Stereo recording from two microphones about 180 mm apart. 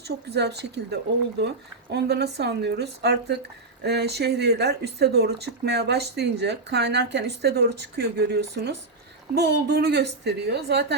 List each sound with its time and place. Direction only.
0.0 s a woman's voice: 65° right (ahead or behind)